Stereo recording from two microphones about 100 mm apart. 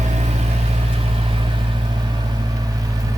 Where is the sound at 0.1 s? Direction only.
90° right.